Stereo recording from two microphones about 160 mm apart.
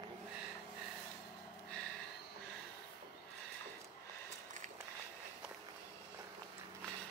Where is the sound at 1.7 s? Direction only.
5° left (ahead or behind).